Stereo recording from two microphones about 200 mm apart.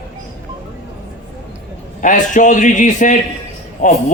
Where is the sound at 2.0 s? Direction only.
40° left (ahead or behind).